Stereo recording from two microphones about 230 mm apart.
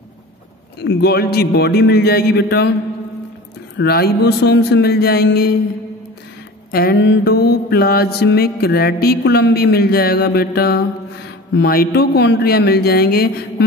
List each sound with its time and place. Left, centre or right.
0.7 s mantra: left
3.7 s mantra: left
6.7 s mantra: left